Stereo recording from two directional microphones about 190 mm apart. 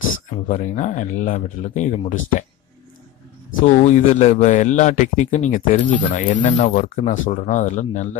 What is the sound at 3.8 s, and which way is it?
Speech, 35° left (ahead or behind).